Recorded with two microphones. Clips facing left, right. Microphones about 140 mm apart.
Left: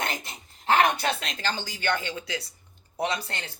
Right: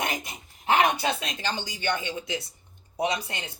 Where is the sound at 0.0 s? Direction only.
15° right (ahead or behind).